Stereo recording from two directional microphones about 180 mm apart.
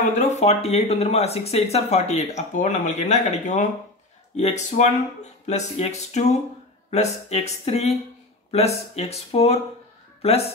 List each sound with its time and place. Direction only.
0.1 s speech: 40° left (ahead or behind)